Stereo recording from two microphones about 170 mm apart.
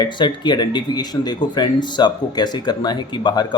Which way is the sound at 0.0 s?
25° left (ahead or behind).